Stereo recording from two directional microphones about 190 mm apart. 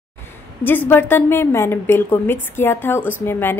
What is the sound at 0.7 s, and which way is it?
A woman's voice, 10° left (ahead or behind).